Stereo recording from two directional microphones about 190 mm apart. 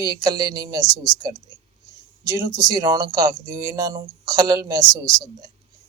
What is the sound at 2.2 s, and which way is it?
Speech, 20° right (ahead or behind).